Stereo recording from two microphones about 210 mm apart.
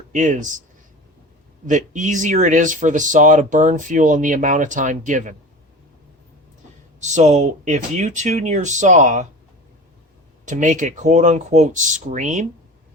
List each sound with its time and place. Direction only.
0.1 s speech: 35° right (ahead or behind)
1.6 s speech: 35° right (ahead or behind)
7.0 s speech: 35° right (ahead or behind)
10.4 s speech: 35° right (ahead or behind)